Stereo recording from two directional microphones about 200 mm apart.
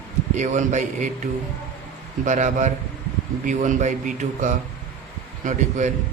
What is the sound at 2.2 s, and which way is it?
A man's voice, 40° right (ahead or behind).